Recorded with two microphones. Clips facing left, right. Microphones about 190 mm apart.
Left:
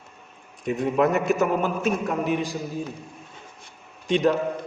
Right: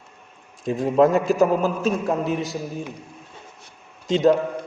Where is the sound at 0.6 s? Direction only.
30° right (ahead or behind).